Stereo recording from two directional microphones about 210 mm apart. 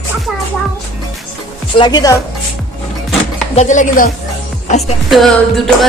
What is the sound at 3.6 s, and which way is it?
Speech, 35° left (ahead or behind).